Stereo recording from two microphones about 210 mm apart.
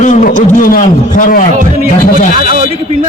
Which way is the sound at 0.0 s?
35° left (ahead or behind).